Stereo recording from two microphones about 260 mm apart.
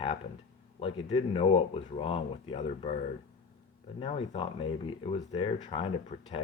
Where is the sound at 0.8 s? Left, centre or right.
Left.